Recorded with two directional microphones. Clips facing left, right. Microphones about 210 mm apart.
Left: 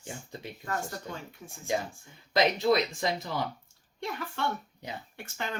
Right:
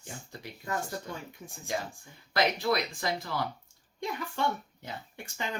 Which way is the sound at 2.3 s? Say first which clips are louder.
Left 3 dB; 20° left (ahead or behind).